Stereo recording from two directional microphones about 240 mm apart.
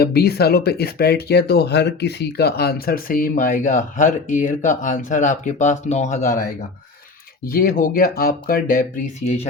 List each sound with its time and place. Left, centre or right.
0.0 s speech: left